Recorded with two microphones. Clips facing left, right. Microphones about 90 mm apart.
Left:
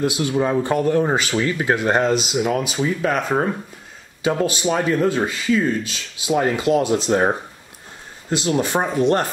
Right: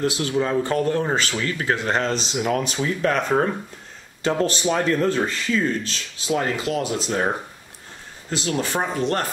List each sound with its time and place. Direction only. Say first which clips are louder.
0.0 s speech: left 2 dB; 15° left (ahead or behind)